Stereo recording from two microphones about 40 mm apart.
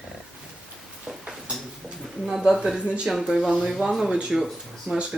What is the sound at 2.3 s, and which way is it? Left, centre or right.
Speech, centre.